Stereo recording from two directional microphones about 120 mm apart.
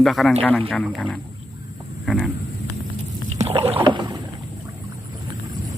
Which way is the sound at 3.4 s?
55° right (ahead or behind).